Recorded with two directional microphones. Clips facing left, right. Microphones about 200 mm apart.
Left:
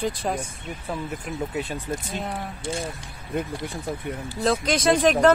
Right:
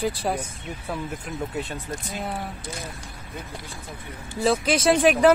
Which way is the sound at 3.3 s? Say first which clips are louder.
Left 10 dB; 60° left (ahead or behind).